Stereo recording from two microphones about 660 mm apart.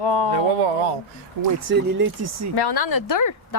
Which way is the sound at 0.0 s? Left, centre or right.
Left.